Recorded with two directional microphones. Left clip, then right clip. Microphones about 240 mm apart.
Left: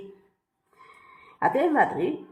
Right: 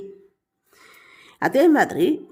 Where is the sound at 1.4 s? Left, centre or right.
Right.